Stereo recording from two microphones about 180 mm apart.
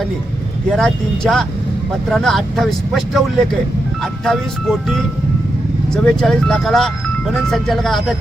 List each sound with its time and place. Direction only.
0.8 s speech: centre (ahead or behind)